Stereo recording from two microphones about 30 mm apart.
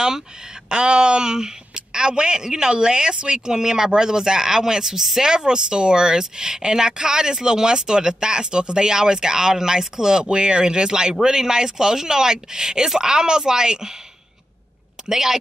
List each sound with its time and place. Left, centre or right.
0.7 s speech: right
10.2 s speech: right; by 13.1 s centre
13.1 s speech: right
15.0 s speech: centre